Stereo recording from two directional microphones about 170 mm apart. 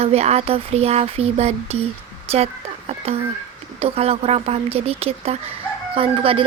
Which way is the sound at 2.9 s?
35° right (ahead or behind).